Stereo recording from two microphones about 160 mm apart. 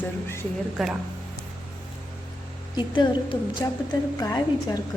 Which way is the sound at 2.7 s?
30° left (ahead or behind).